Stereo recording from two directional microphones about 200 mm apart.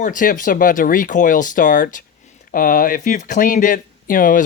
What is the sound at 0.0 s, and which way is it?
Speech, 40° left (ahead or behind).